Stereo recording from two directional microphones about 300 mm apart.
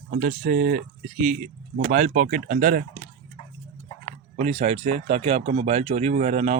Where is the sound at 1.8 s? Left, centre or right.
Right.